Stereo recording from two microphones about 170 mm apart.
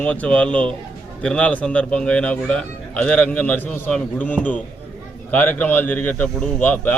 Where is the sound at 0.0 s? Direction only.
5° left (ahead or behind).